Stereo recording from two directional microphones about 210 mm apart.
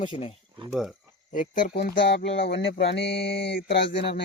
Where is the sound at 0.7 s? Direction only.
Centre (ahead or behind).